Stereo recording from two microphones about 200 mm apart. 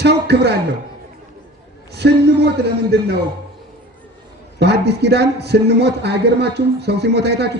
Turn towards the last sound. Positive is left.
turn(degrees=-55)  # may be behind; listen again after turning